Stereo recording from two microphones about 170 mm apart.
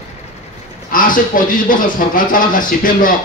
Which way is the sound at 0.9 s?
55° left (ahead or behind).